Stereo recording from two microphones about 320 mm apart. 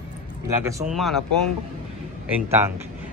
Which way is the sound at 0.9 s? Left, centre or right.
Centre.